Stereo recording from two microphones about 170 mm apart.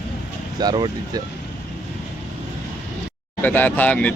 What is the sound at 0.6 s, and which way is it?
Speech, 25° right (ahead or behind).